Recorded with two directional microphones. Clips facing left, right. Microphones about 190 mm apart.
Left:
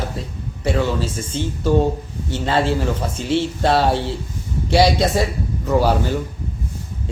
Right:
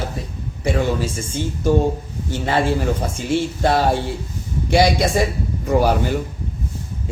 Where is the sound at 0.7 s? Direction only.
50° right (ahead or behind).